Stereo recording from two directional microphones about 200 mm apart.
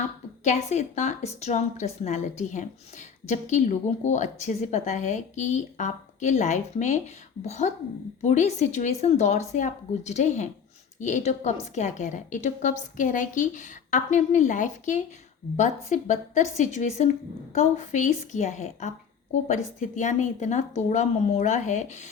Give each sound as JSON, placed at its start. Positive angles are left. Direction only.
{"t": 0.4, "sound": "a woman's voice", "side_deg": 35}